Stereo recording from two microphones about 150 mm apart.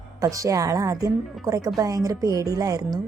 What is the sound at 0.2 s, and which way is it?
A woman's voice, 20° right (ahead or behind).